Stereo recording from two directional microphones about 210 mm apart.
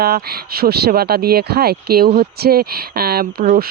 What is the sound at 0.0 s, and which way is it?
Speech, 45° right (ahead or behind).